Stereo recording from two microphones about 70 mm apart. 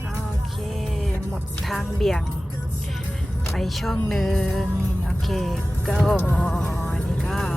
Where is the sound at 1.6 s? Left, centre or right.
Centre.